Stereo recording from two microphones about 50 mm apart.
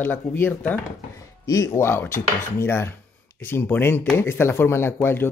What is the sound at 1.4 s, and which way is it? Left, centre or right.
Speech, left.